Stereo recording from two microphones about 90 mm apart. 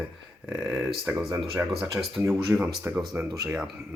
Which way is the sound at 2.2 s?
35° right (ahead or behind).